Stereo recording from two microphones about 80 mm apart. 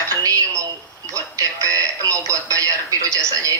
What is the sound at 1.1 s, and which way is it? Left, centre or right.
Speech, right.